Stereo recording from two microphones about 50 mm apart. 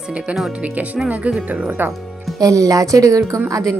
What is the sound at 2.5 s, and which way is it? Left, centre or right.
Speech, right.